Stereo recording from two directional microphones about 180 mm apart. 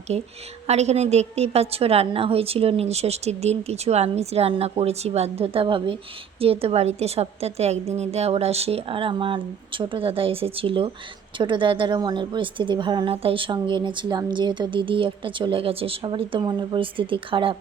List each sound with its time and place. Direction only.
0.1 s a woman's voice: 35° right (ahead or behind)